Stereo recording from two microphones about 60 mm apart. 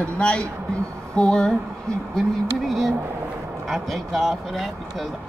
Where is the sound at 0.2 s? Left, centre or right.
Centre.